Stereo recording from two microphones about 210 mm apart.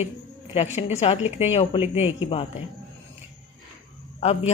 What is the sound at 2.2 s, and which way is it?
Speech, 25° left (ahead or behind).